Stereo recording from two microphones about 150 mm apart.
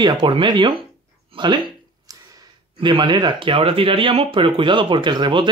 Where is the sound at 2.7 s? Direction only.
35° right (ahead or behind).